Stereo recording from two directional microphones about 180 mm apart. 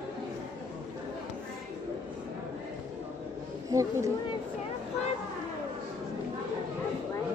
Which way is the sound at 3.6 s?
20° right (ahead or behind).